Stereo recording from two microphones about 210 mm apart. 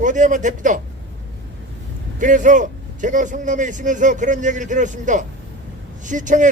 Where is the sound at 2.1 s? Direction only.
35° right (ahead or behind).